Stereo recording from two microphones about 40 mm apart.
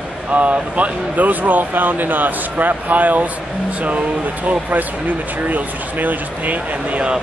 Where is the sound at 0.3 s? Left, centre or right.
Right.